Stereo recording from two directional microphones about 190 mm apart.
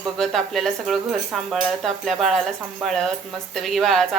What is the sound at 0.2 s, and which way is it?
Speech, centre (ahead or behind).